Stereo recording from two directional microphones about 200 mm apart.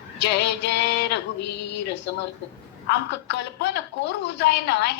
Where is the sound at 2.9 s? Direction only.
60° left (ahead or behind).